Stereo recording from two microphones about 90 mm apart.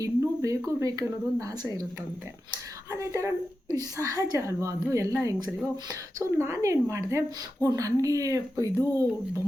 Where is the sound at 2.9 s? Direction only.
35° right (ahead or behind).